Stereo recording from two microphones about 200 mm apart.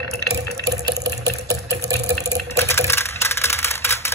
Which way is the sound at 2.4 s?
10° left (ahead or behind).